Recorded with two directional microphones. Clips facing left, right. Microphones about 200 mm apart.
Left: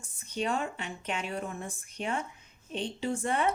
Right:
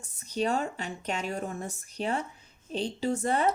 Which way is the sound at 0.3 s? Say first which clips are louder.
Right 3 dB; 40° right (ahead or behind).